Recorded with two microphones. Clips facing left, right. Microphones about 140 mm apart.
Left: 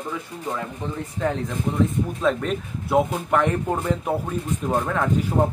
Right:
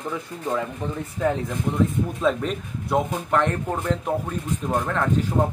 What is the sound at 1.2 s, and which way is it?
Speech, 10° right (ahead or behind).